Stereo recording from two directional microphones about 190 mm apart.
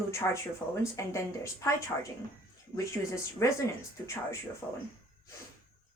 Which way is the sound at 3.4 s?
15° left (ahead or behind).